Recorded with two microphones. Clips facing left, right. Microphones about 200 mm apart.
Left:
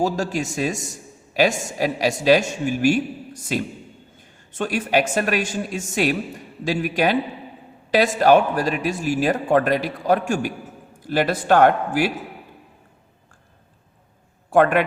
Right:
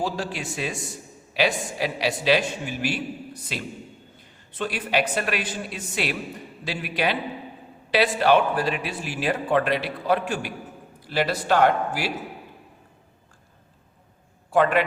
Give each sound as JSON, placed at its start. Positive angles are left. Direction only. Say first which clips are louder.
{"t": 0.0, "sound": "a man's voice", "louder": "left 6 dB", "side_deg": 45}
{"t": 14.5, "sound": "a man's voice", "louder": "left 4 dB", "side_deg": 55}